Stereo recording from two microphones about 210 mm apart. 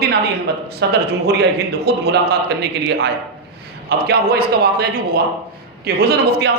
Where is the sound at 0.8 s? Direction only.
55° right (ahead or behind).